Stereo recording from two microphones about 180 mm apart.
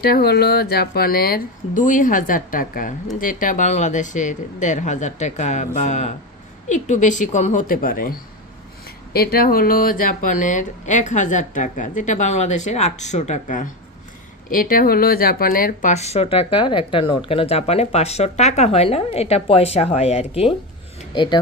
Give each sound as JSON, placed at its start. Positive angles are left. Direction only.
{"t": 0.0, "sound": "speech", "side_deg": 60}
{"t": 9.1, "sound": "speech", "side_deg": 55}
{"t": 21.2, "sound": "speech", "side_deg": 25}